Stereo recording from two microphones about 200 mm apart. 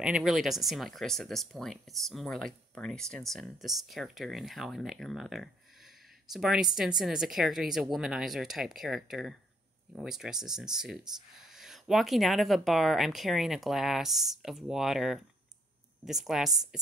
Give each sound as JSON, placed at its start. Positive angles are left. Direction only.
{"t": 0.0, "sound": "speech", "side_deg": -5}